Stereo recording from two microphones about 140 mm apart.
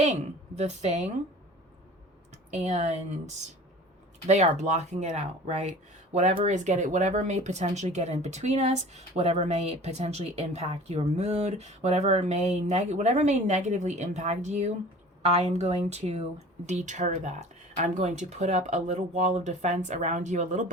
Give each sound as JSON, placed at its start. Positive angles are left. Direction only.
{"t": 0.0, "sound": "a woman's voice", "side_deg": -55}
{"t": 2.5, "sound": "speech", "side_deg": -50}
{"t": 4.3, "sound": "speech", "side_deg": -55}